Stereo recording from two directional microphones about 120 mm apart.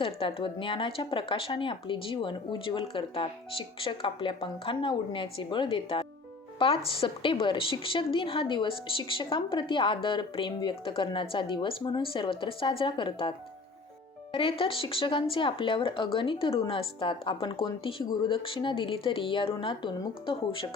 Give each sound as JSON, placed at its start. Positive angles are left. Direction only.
{"t": 0.0, "sound": "a woman's voice", "side_deg": 50}
{"t": 14.3, "sound": "a woman's voice", "side_deg": 50}